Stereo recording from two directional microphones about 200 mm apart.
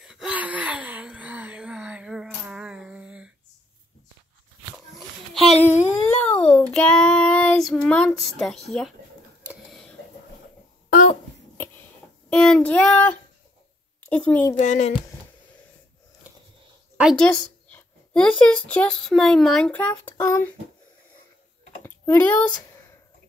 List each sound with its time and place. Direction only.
0.0 s wail: 5° right (ahead or behind)
5.6 s a sound: 10° left (ahead or behind)
6.7 s child singing: 5° left (ahead or behind)
8.2 s speech: centre (ahead or behind)
9.7 s a sound: centre (ahead or behind)
12.3 s child singing: 5° left (ahead or behind)
14.0 s a woman's voice: 5° left (ahead or behind)
14.6 s speech: 35° left (ahead or behind)
16.9 s speech: centre (ahead or behind)
21.8 s typing: 10° left (ahead or behind)